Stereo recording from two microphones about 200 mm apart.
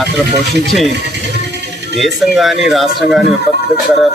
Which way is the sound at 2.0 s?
Centre (ahead or behind).